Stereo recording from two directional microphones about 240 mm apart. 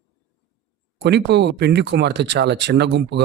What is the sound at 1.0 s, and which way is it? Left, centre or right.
Speech, right.